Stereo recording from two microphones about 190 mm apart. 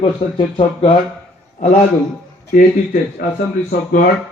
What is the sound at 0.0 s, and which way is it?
Speech, 30° left (ahead or behind).